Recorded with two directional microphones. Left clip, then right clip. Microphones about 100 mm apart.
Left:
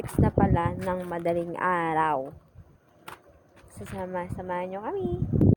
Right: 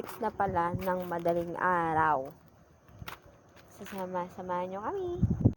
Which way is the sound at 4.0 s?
15° left (ahead or behind).